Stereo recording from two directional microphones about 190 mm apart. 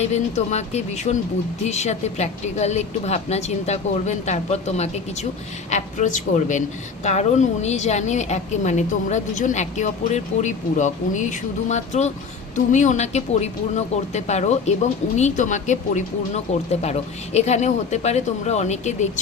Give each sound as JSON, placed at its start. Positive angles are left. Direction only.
{"t": 0.0, "sound": "a woman's voice", "side_deg": 35}